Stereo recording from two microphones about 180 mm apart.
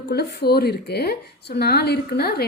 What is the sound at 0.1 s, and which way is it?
A woman's voice, 65° left (ahead or behind).